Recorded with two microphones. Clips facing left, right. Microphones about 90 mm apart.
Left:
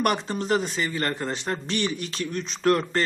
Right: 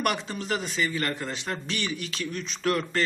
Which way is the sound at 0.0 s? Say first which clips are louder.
Left 4 dB; 35° left (ahead or behind).